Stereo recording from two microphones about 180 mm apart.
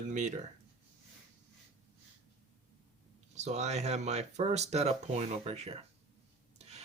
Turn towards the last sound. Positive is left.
turn(degrees=-35)  # may be behind; listen again after turning